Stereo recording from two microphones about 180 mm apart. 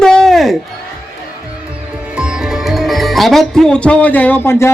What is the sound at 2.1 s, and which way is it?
Music, 5° right (ahead or behind).